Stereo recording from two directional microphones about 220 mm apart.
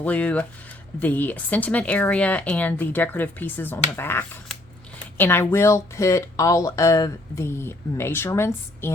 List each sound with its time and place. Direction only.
0.0 s speech: 5° left (ahead or behind)